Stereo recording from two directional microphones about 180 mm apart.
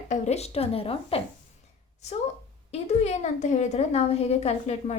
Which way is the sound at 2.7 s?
40° left (ahead or behind).